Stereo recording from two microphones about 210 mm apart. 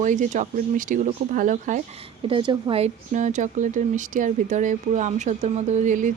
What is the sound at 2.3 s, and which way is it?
A woman's voice, 25° right (ahead or behind).